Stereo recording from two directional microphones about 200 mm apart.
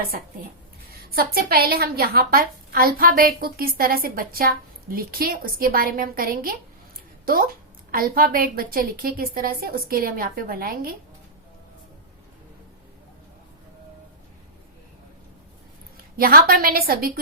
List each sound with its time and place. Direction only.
0.9 s a woman's voice: 50° right (ahead or behind)
7.9 s a woman's voice: 45° right (ahead or behind)
16.1 s a woman's voice: 45° right (ahead or behind)